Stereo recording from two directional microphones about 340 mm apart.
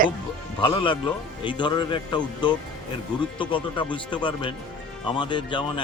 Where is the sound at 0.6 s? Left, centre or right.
Centre.